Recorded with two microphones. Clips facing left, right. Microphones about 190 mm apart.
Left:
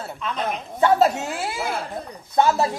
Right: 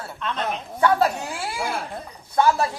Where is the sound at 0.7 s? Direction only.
20° left (ahead or behind).